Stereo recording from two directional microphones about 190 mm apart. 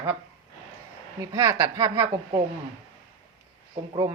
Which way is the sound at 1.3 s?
15° right (ahead or behind).